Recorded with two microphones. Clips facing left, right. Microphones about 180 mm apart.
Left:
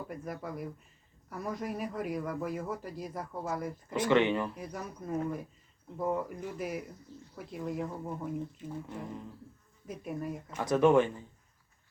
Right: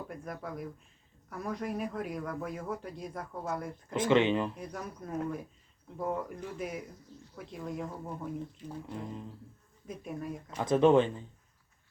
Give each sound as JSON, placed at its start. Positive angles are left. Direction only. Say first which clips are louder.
{"t": 0.1, "sound": "speech", "louder": "left 1 dB", "side_deg": 0}
{"t": 4.0, "sound": "speech", "louder": "right 1 dB", "side_deg": -20}
{"t": 4.5, "sound": "speech", "louder": "even", "side_deg": 5}
{"t": 8.9, "sound": "speech", "louder": "right 1 dB", "side_deg": -15}
{"t": 9.8, "sound": "speech", "louder": "left 2 dB", "side_deg": 5}
{"t": 10.6, "sound": "speech", "louder": "right 1 dB", "side_deg": -20}